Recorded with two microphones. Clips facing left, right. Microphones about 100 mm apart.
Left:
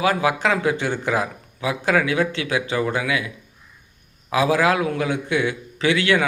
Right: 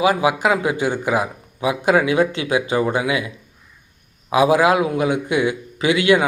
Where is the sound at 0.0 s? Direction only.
15° right (ahead or behind).